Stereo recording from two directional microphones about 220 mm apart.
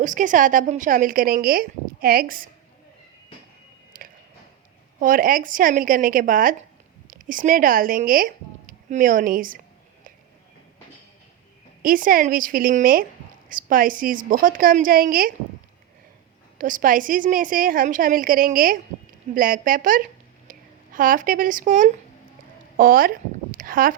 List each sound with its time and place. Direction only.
0.0 s a woman's voice: 35° right (ahead or behind)
3.9 s a sound: 40° right (ahead or behind)
4.9 s a woman's voice: 40° right (ahead or behind)
11.8 s a woman's voice: 40° right (ahead or behind)
16.6 s a woman's voice: 35° right (ahead or behind)